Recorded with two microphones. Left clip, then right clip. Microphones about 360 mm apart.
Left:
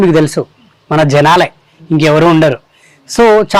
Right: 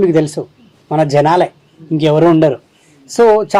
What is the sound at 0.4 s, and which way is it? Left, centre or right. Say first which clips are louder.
Speech: left 6 dB; left.